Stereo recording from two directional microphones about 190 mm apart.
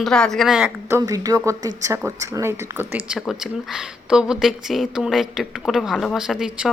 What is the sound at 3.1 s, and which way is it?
Speech, centre (ahead or behind).